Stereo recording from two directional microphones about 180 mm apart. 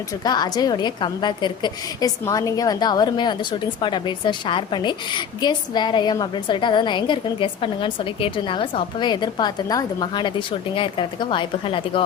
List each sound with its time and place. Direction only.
0.3 s a woman's voice: 20° left (ahead or behind)